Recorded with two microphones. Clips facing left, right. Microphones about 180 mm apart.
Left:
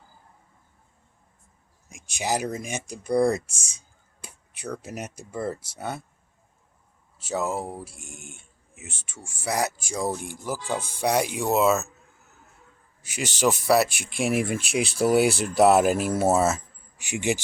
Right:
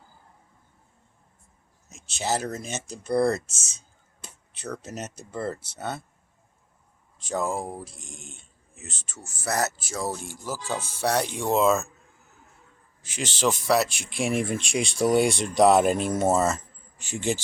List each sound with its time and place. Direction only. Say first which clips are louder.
1.9 s speech: even; 15° left (ahead or behind)
7.2 s speech: even; 5° left (ahead or behind)
13.0 s speech: left 2 dB; 10° left (ahead or behind)